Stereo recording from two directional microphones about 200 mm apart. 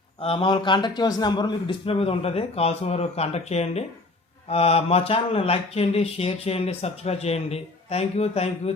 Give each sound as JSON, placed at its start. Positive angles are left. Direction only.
{"t": 0.2, "sound": "a man's voice", "side_deg": 30}